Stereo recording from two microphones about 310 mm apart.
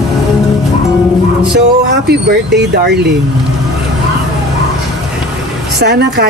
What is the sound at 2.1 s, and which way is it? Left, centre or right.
Speech, right.